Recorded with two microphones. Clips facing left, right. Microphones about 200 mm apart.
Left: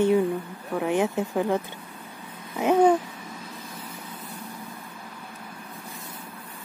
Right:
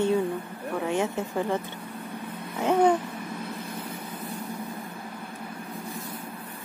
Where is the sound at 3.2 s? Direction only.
60° right (ahead or behind).